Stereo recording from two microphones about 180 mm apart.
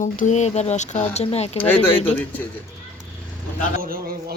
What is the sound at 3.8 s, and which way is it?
Speech, 55° right (ahead or behind).